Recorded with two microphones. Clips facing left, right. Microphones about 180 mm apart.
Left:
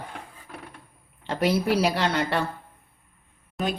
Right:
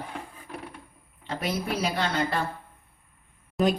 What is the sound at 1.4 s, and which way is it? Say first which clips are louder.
Speech: left 7 dB; 75° left (ahead or behind).